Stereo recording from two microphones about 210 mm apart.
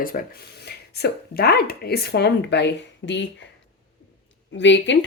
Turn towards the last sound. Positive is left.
turn(degrees=60)  # may be behind; listen again after turning